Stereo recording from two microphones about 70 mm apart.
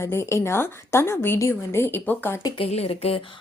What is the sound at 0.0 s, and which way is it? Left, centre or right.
A woman's voice, left.